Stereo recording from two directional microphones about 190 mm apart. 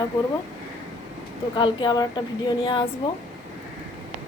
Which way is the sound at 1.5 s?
25° left (ahead or behind).